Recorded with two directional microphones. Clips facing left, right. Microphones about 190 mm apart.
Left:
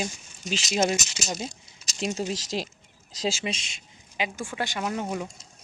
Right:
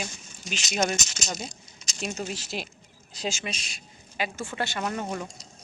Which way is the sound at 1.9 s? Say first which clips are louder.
Left 4 dB; 20° left (ahead or behind).